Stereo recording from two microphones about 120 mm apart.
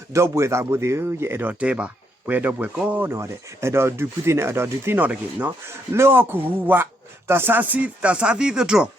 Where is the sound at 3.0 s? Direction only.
20° right (ahead or behind).